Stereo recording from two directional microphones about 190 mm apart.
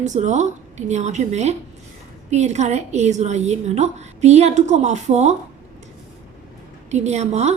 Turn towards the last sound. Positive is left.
turn(degrees=-35)  # may be behind; listen again after turning